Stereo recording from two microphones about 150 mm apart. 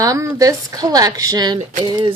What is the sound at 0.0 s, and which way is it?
A woman's voice, 20° right (ahead or behind).